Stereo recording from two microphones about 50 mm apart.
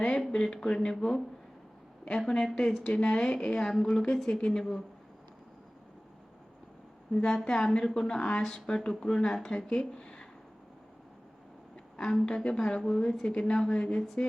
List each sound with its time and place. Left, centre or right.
0.0 s a woman's voice: centre
2.0 s a woman's voice: centre
7.1 s a woman's voice: centre
11.9 s a woman's voice: centre